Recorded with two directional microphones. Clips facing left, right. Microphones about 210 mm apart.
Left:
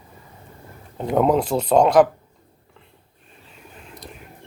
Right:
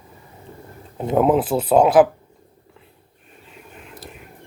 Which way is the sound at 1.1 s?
5° right (ahead or behind).